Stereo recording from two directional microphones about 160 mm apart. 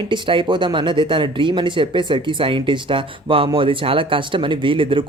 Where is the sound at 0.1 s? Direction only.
30° right (ahead or behind).